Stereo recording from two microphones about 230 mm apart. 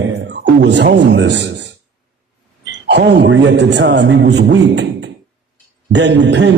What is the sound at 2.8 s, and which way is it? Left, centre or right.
A man's voice, right.